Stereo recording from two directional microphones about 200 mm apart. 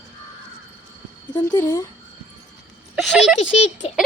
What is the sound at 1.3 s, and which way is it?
Speech, 15° left (ahead or behind).